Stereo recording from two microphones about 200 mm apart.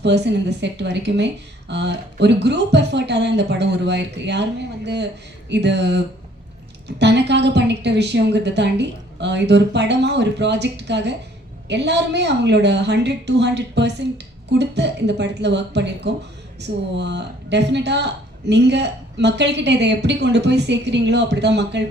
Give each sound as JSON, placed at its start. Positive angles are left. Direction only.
{"t": 0.0, "sound": "a woman's voice", "side_deg": -60}
{"t": 5.5, "sound": "a woman's voice", "side_deg": -60}